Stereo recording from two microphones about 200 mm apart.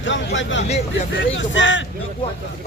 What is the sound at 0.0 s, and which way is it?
Speech, 70° left (ahead or behind).